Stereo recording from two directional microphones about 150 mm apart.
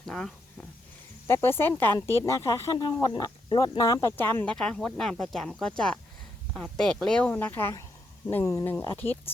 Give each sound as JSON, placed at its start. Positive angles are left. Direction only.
{"t": 0.1, "sound": "speech", "side_deg": 5}
{"t": 1.3, "sound": "speech", "side_deg": 15}
{"t": 4.2, "sound": "speech", "side_deg": 15}